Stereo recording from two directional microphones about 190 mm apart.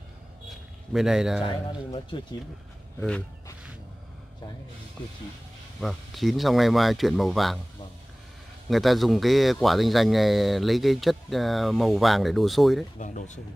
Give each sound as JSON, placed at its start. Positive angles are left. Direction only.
{"t": 0.5, "sound": "a sound", "side_deg": 0}
{"t": 3.0, "sound": "speech", "side_deg": 5}
{"t": 5.8, "sound": "a man's voice", "side_deg": 0}
{"t": 8.6, "sound": "a man's voice", "side_deg": 0}
{"t": 13.0, "sound": "speech", "side_deg": 40}